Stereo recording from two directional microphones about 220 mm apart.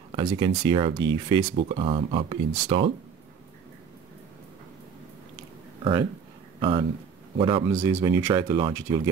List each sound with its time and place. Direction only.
0.1 s speech: 20° right (ahead or behind)
6.6 s speech: 25° right (ahead or behind)
7.7 s speech: 10° right (ahead or behind)